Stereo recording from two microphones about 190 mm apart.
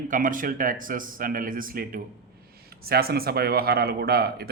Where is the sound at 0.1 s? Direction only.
45° right (ahead or behind).